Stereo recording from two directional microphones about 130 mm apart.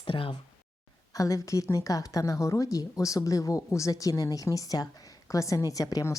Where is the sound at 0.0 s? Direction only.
40° left (ahead or behind).